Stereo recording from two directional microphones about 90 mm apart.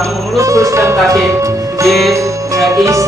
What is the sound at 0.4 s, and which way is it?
Speech, 35° right (ahead or behind).